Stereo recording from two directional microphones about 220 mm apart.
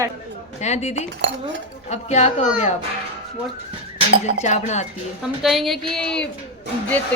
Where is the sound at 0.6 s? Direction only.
30° left (ahead or behind).